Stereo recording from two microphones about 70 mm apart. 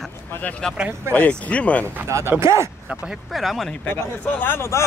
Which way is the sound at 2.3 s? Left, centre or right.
Right.